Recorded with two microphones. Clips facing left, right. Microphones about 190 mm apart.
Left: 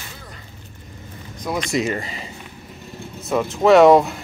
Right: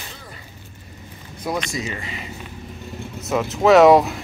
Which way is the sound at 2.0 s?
35° left (ahead or behind).